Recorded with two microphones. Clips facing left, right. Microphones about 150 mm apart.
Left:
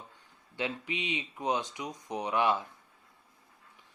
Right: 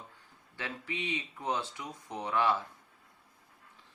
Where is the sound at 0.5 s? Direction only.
20° left (ahead or behind).